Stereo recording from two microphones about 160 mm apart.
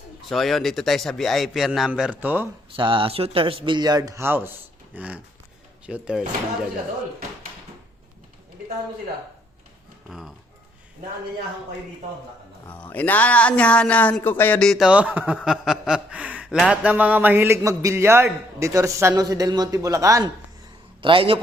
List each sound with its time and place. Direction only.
0.3 s a man's voice: centre (ahead or behind)
2.7 s speech: 30° right (ahead or behind); by 4.5 s 15° right (ahead or behind)
4.9 s a sound: 10° right (ahead or behind)
5.8 s speech: 5° right (ahead or behind)
10.1 s a man's voice: centre (ahead or behind)
12.6 s speech: 10° left (ahead or behind); by 15.4 s 10° right (ahead or behind)
15.4 s a sound: centre (ahead or behind); by 20.3 s 20° right (ahead or behind)
21.0 s speech: 35° right (ahead or behind)